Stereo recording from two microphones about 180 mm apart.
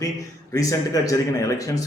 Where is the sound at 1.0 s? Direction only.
20° left (ahead or behind).